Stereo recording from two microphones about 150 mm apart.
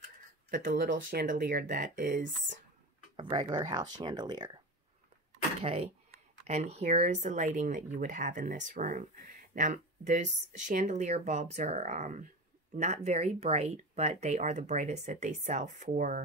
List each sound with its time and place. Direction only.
0.5 s speech: 65° right (ahead or behind)
3.2 s speech: 30° right (ahead or behind)
5.6 s speech: 40° right (ahead or behind); by 16.2 s 60° right (ahead or behind)